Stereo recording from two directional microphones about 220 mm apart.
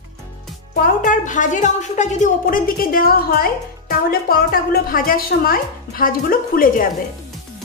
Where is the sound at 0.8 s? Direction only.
35° left (ahead or behind).